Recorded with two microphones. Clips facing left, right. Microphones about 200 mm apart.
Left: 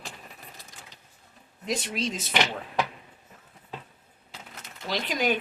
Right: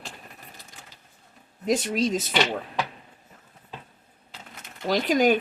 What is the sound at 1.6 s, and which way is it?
Speech, 45° right (ahead or behind).